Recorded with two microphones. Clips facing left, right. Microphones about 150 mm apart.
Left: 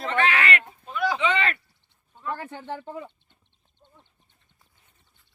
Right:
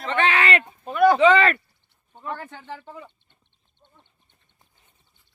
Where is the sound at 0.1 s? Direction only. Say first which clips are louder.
Right 3 dB; 25° right (ahead or behind).